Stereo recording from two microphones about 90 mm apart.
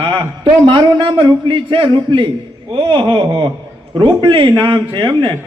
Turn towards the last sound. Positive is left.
turn(degrees=-55)  # may be behind; listen again after turning